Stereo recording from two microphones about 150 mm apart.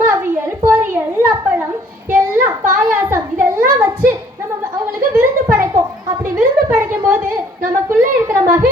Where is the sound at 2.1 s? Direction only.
20° right (ahead or behind).